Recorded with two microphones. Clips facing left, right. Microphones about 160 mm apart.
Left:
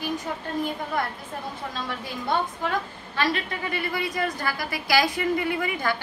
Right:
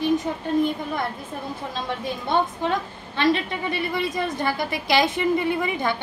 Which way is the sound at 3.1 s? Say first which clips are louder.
Right 5 dB; 25° right (ahead or behind).